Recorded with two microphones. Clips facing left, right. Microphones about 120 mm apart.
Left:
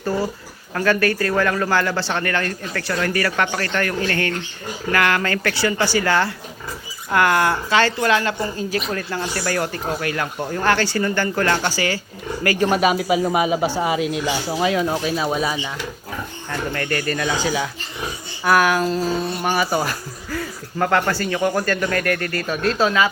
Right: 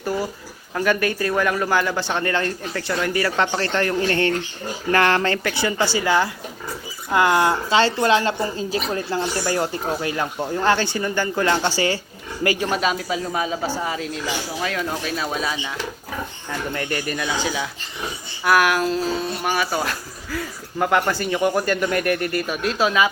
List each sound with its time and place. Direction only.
0.7 s speech: 15° right (ahead or behind)
12.7 s speech: 5° left (ahead or behind)
16.5 s speech: 15° right (ahead or behind)
22.4 s speech: 10° right (ahead or behind)